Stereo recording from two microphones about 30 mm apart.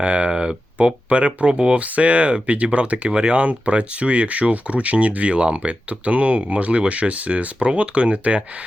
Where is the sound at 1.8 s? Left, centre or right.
Right.